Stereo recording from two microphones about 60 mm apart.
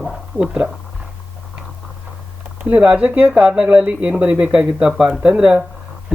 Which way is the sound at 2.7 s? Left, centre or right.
Right.